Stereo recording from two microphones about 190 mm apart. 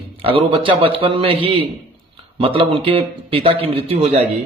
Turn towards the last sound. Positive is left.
turn(degrees=-30)  # may be behind; listen again after turning